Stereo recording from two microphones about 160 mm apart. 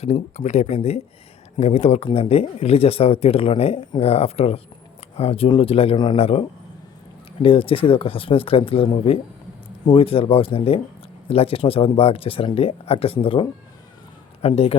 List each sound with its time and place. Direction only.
0.0 s speech: 45° left (ahead or behind)
7.4 s speech: 35° left (ahead or behind)